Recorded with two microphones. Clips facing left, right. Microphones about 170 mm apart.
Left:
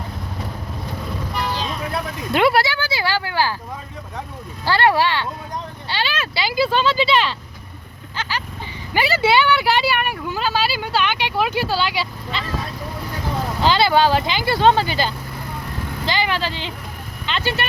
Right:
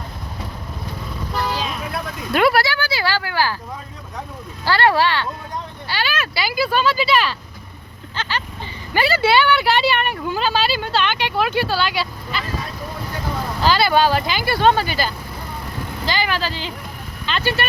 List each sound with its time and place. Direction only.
2.3 s speech: 20° left (ahead or behind)
4.6 s speech: 20° left (ahead or behind)
8.1 s a sound: 10° left (ahead or behind)
8.9 s speech: 15° left (ahead or behind)
13.6 s speech: 20° left (ahead or behind)